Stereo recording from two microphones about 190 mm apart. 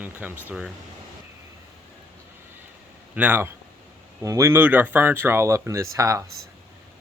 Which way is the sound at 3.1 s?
10° right (ahead or behind).